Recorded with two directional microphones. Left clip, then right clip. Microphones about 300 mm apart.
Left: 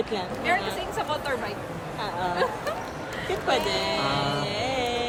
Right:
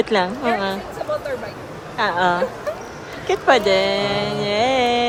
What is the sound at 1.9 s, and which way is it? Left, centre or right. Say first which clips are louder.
Speech: right 12 dB; right.